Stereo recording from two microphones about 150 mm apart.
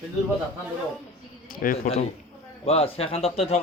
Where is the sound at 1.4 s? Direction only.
70° left (ahead or behind).